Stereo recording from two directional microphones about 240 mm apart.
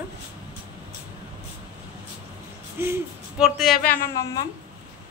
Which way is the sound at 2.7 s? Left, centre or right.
Centre.